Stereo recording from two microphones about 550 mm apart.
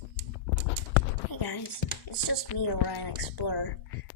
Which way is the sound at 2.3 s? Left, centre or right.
Left.